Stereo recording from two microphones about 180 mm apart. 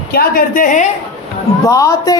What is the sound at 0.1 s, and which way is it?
Speech, 55° left (ahead or behind).